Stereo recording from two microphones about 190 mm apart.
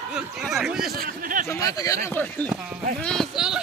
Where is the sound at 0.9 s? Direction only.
50° right (ahead or behind).